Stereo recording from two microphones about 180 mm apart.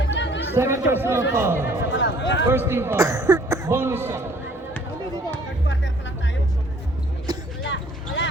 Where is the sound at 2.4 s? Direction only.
10° right (ahead or behind).